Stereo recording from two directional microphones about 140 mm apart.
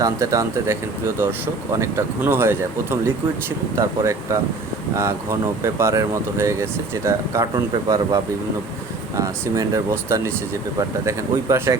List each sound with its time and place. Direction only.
0.0 s speech: 25° right (ahead or behind)
7.5 s speech: 30° right (ahead or behind)